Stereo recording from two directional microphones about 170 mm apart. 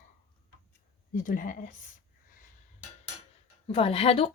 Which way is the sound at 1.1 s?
55° left (ahead or behind).